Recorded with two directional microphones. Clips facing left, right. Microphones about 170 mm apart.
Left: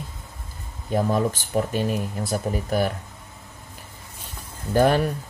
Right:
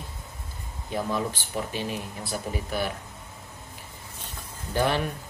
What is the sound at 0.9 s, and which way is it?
Speech, 45° left (ahead or behind).